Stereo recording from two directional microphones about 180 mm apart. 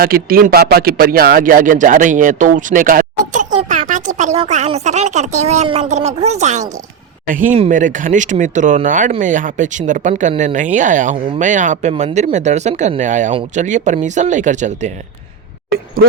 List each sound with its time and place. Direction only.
0.0 s speech: 55° right (ahead or behind)